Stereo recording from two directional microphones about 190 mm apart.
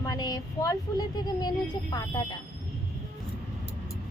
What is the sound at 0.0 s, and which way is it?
Speech, 20° left (ahead or behind).